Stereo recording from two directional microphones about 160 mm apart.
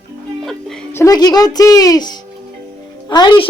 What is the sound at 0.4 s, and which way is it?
Music, 5° left (ahead or behind).